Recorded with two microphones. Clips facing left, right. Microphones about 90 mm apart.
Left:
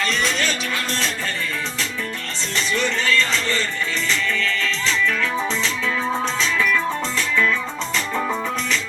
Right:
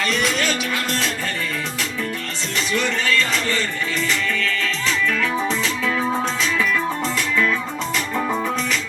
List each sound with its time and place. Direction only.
0.0 s music: 35° left (ahead or behind)
2.6 s music: 35° left (ahead or behind)